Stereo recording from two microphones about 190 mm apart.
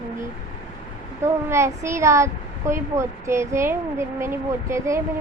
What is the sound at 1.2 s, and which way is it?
A child's voice, 15° right (ahead or behind).